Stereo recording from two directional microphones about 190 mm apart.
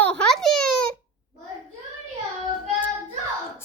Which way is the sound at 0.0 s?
5° left (ahead or behind).